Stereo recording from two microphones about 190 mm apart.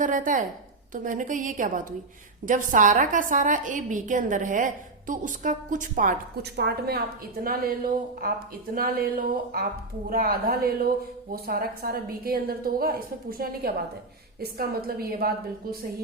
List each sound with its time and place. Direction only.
0.0 s a woman's voice: 45° right (ahead or behind)
6.6 s a woman's voice: 55° right (ahead or behind)